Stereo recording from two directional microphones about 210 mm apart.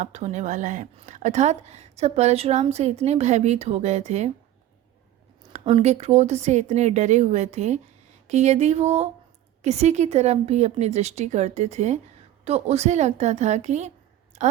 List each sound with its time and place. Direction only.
0.0 s a woman's voice: 35° right (ahead or behind)
5.5 s a woman's voice: 30° right (ahead or behind)